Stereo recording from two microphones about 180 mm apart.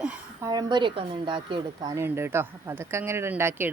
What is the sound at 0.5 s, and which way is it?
Speech, 25° right (ahead or behind).